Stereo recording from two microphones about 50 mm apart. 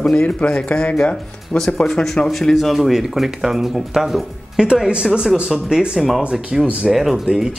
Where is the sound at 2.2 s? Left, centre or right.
Centre.